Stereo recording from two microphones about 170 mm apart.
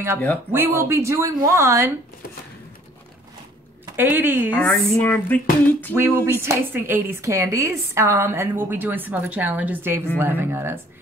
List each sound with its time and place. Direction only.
0.5 s a woman's voice: 15° right (ahead or behind)
3.9 s a woman's voice: 10° right (ahead or behind)
4.8 s a sound: 5° left (ahead or behind)
5.9 s a woman's voice: 15° right (ahead or behind)